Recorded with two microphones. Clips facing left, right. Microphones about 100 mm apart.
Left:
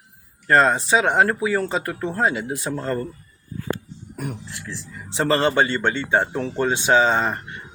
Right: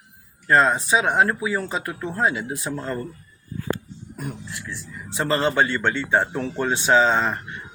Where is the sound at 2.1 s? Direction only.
40° left (ahead or behind).